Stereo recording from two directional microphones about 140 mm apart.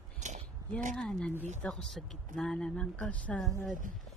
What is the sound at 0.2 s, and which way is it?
Biting, 60° right (ahead or behind).